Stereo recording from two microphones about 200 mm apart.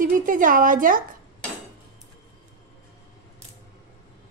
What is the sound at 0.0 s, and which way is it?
A woman's voice, 40° right (ahead or behind).